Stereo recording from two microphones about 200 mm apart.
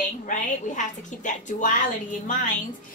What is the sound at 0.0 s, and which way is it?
A woman's voice, 40° left (ahead or behind).